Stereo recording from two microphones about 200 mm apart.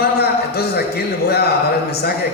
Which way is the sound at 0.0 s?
50° left (ahead or behind).